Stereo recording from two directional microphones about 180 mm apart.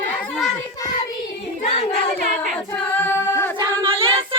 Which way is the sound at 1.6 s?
35° left (ahead or behind).